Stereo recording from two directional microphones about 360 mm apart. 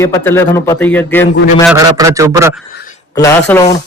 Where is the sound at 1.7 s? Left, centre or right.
Centre.